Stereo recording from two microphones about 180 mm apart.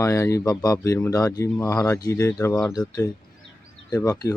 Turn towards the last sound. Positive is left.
turn(degrees=20)  # may be behind; listen again after turning